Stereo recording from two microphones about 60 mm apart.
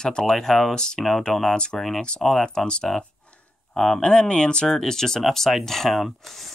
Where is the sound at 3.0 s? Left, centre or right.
Centre.